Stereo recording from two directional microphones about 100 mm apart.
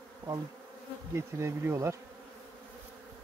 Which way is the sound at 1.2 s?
25° right (ahead or behind).